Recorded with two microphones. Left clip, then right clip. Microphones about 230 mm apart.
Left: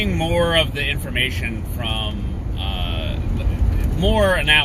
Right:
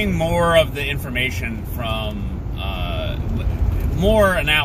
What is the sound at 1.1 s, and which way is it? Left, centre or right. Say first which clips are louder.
Speech: left 1 dB; centre.